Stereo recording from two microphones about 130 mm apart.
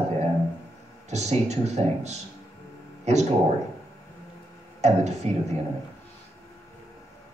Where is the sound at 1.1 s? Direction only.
60° right (ahead or behind).